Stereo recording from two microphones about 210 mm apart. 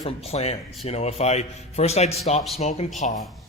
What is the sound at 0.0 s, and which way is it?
A man's voice, 30° left (ahead or behind).